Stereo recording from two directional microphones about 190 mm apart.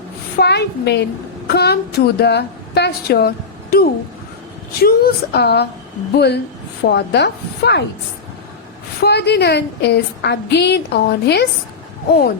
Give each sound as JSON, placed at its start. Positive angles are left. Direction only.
{"t": 0.3, "sound": "a woman's voice", "side_deg": 60}
{"t": 9.0, "sound": "a woman's voice", "side_deg": 60}